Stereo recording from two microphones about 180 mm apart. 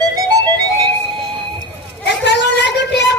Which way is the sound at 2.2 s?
75° left (ahead or behind).